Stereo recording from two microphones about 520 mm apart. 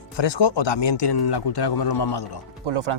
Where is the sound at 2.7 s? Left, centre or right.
Right.